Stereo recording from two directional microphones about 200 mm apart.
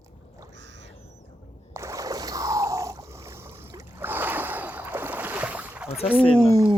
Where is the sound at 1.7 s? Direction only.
15° right (ahead or behind).